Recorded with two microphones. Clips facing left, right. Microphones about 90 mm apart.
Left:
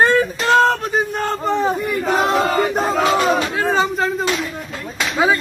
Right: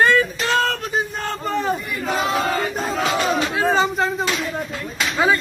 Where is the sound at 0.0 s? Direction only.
35° left (ahead or behind).